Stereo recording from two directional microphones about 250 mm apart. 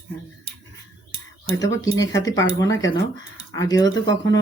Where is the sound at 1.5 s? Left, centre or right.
Centre.